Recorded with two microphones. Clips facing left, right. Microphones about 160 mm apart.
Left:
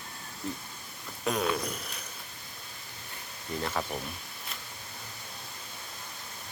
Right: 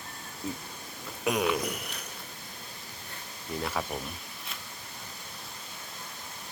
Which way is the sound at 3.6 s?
5° right (ahead or behind).